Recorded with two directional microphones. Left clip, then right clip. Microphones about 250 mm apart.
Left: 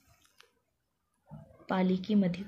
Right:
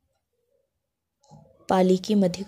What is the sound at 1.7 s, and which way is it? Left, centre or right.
Speech, right.